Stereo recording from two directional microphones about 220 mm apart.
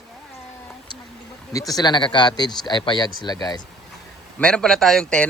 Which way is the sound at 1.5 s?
15° left (ahead or behind).